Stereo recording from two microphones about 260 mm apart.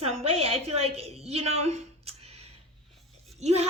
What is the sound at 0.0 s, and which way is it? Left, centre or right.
A woman's voice, right.